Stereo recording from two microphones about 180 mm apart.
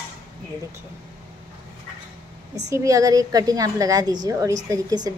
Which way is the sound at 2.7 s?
15° right (ahead or behind).